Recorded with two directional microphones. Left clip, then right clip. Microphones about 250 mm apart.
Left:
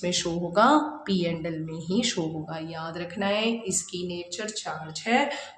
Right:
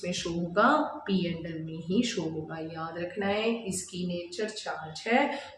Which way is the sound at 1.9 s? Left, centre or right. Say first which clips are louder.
Left 3 dB; left.